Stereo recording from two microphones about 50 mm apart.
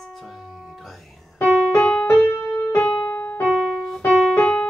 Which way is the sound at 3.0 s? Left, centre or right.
Left.